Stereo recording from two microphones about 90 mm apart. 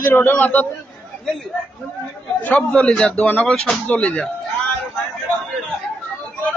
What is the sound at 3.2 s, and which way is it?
A man's voice, 20° left (ahead or behind).